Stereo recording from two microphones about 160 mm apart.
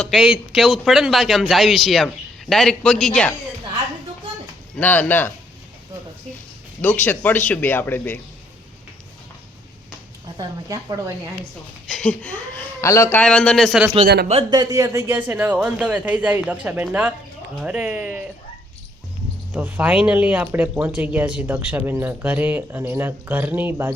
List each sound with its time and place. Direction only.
0.0 s speech: centre (ahead or behind)
4.8 s a man's voice: 10° left (ahead or behind)
6.8 s a man's voice: 10° left (ahead or behind)
10.3 s a woman's voice: 25° right (ahead or behind)
11.9 s a man's voice: 5° left (ahead or behind)
14.5 s speech: 25° right (ahead or behind)
19.5 s speech: 10° right (ahead or behind)